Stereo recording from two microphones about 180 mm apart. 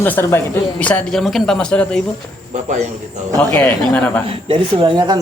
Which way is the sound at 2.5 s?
40° right (ahead or behind).